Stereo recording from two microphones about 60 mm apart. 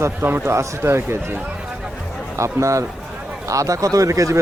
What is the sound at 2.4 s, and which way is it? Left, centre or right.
Speech, right.